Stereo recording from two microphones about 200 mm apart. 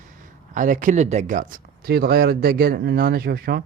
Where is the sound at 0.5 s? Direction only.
40° right (ahead or behind).